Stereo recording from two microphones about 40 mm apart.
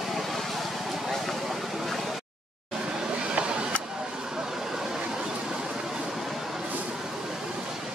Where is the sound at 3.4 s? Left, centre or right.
Right.